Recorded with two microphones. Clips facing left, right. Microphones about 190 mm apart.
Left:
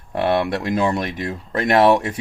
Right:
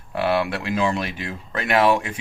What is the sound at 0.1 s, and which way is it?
Speech, 40° left (ahead or behind).